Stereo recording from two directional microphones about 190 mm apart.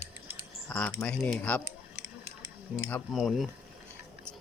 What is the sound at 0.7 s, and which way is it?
Speech, 10° left (ahead or behind).